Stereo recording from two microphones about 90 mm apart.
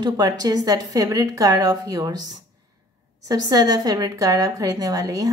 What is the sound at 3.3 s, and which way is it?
A woman's voice, 45° right (ahead or behind).